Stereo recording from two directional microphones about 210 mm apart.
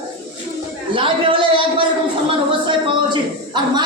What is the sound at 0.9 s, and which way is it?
A man's voice, 25° right (ahead or behind).